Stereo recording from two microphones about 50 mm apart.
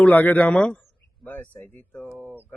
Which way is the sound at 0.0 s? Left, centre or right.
Left.